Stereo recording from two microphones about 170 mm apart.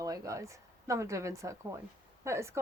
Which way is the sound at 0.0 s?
20° right (ahead or behind).